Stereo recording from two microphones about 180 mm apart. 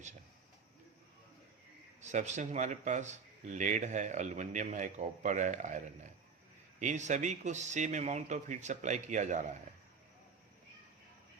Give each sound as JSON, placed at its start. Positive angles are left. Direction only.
{"t": 2.0, "sound": "speech", "side_deg": -40}